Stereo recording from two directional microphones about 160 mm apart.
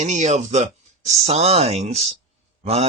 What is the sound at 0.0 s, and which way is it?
Speech, 45° right (ahead or behind).